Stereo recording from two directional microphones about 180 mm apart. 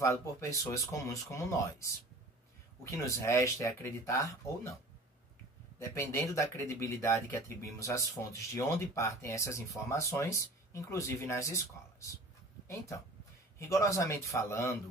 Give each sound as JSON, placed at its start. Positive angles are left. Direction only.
{"t": 0.0, "sound": "speech", "side_deg": 15}
{"t": 5.8, "sound": "speech", "side_deg": 15}